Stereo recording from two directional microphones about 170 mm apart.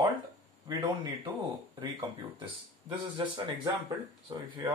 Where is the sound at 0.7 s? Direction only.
25° right (ahead or behind).